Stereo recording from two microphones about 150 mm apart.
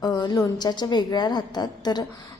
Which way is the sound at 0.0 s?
25° left (ahead or behind).